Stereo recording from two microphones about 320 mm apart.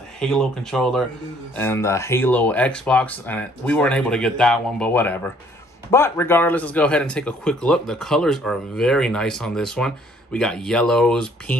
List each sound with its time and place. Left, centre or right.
0.2 s speech: centre